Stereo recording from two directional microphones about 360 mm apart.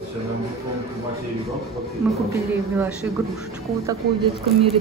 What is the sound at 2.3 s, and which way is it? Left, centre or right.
Speech, centre.